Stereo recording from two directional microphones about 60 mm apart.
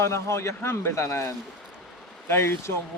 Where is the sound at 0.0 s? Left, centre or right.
Left.